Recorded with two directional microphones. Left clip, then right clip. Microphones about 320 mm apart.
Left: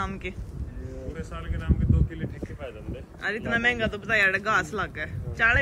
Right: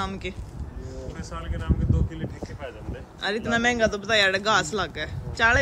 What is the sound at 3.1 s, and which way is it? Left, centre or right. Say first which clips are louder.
Speech: right 2 dB; centre.